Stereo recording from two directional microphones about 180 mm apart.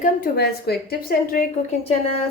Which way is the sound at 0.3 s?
60° left (ahead or behind).